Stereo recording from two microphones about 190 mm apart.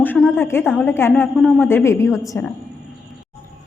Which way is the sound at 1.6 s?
15° left (ahead or behind).